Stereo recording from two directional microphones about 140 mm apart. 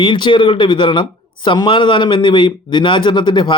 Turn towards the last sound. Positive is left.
turn(degrees=35)  # may be behind; listen again after turning